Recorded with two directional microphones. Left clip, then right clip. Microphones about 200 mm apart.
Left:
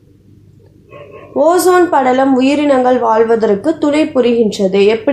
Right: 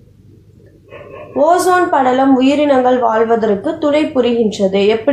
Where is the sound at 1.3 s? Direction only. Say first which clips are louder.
Left 1 dB; 45° left (ahead or behind).